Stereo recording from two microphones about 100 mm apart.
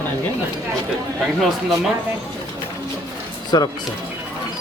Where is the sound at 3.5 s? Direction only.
45° left (ahead or behind).